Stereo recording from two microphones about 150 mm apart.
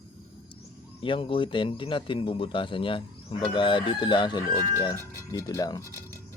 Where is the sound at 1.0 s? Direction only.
35° left (ahead or behind).